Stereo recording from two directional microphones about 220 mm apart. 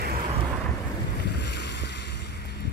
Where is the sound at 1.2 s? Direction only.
50° left (ahead or behind).